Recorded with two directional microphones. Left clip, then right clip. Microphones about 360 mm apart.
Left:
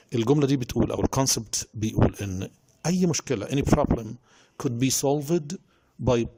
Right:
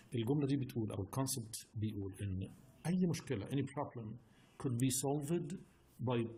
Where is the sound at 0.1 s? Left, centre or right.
Left.